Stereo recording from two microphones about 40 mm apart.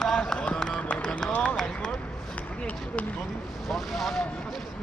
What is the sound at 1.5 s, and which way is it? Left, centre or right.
Speech, centre.